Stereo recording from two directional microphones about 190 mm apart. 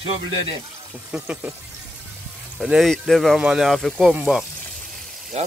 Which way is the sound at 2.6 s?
Centre (ahead or behind).